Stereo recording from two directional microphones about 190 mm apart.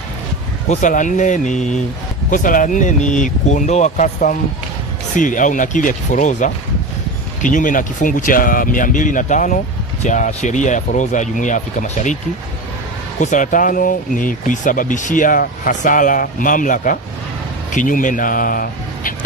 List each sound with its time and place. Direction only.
0.7 s speech: 40° left (ahead or behind)
13.2 s speech: 40° left (ahead or behind)